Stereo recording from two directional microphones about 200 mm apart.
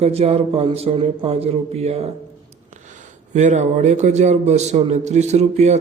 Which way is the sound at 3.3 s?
35° right (ahead or behind).